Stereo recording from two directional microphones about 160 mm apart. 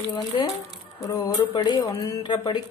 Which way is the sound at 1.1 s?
25° left (ahead or behind).